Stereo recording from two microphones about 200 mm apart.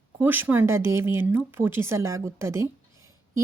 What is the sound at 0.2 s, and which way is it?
Speech, 10° right (ahead or behind).